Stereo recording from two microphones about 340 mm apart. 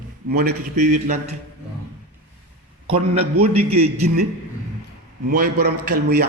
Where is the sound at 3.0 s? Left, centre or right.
Centre.